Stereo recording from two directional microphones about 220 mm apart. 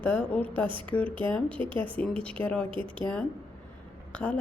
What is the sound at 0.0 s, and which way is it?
A woman's voice, 5° left (ahead or behind).